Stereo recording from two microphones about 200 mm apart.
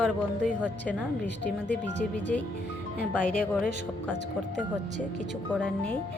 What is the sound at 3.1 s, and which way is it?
Speech, 5° left (ahead or behind).